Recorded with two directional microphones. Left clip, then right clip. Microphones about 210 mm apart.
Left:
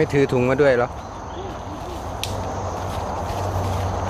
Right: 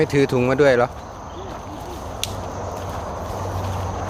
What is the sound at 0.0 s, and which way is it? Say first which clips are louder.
Speech: even; 20° right (ahead or behind).